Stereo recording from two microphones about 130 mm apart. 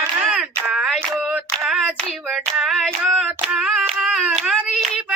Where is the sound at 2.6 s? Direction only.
5° right (ahead or behind).